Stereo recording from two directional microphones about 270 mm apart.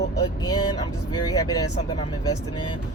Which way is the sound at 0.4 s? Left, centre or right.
Centre.